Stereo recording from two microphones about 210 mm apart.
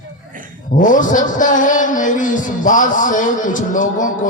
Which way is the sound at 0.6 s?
40° left (ahead or behind).